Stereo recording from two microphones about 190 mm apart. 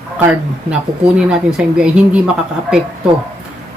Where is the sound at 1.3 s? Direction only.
5° right (ahead or behind).